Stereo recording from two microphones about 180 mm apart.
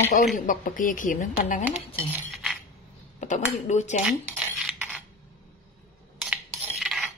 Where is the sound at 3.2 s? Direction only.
40° left (ahead or behind).